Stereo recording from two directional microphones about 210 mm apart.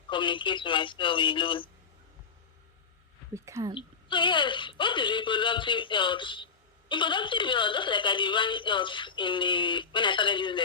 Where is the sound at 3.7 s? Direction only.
25° left (ahead or behind).